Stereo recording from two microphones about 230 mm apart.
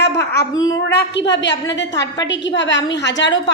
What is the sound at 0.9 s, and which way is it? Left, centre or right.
A woman's voice, left.